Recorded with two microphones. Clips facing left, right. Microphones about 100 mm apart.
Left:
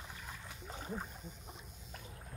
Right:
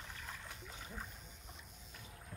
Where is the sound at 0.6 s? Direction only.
40° left (ahead or behind).